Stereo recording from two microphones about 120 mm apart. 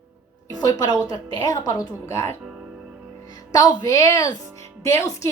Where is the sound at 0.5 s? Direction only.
35° left (ahead or behind).